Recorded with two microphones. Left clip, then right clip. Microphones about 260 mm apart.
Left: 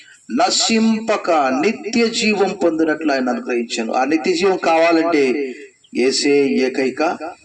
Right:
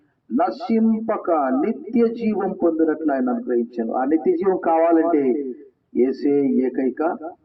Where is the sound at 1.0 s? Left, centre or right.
Left.